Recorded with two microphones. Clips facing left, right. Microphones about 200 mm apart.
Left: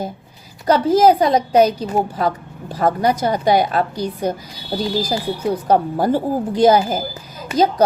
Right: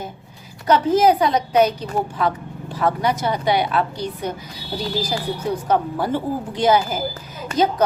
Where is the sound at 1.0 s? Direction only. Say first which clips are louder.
Left 3 dB; 40° left (ahead or behind).